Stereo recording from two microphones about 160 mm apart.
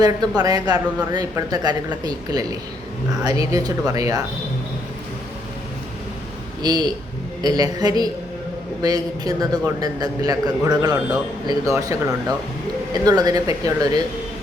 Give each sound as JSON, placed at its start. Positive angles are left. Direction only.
{"t": 0.0, "sound": "a man's voice", "side_deg": -25}
{"t": 6.6, "sound": "a man's voice", "side_deg": -25}